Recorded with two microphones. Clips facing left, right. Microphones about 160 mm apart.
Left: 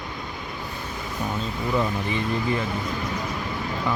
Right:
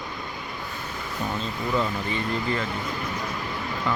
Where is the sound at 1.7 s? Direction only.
15° left (ahead or behind).